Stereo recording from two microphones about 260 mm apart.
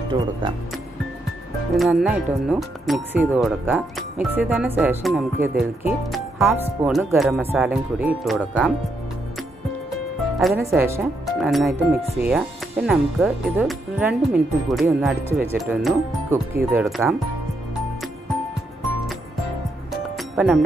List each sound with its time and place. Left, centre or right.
0.1 s speech: centre
1.8 s speech: centre
10.7 s speech: centre
20.2 s music: centre